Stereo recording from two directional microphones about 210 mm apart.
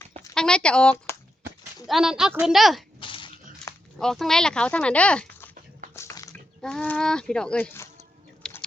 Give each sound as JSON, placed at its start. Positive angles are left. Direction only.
{"t": 0.3, "sound": "speech", "side_deg": 5}
{"t": 3.0, "sound": "biting", "side_deg": 25}
{"t": 3.9, "sound": "speech", "side_deg": 0}
{"t": 5.9, "sound": "a sound", "side_deg": 15}
{"t": 6.6, "sound": "speech", "side_deg": 5}
{"t": 8.4, "sound": "a sound", "side_deg": 5}